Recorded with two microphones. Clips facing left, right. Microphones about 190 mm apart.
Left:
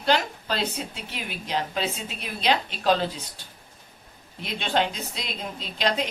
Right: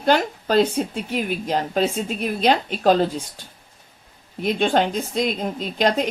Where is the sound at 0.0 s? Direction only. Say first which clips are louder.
Right 5 dB; 50° right (ahead or behind).